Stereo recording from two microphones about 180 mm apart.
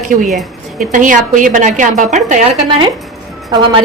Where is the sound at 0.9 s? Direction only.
45° right (ahead or behind).